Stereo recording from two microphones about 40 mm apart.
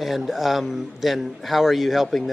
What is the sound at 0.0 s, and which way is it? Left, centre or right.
A man's voice, centre.